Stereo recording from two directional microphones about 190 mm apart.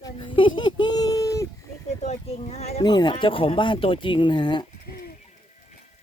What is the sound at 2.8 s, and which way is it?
Speech, 20° left (ahead or behind).